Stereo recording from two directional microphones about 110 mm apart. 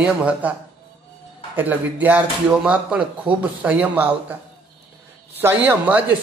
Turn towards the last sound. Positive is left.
turn(degrees=-20)  # may be behind; listen again after turning